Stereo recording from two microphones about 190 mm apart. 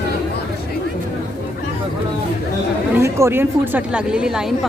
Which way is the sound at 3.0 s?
15° right (ahead or behind).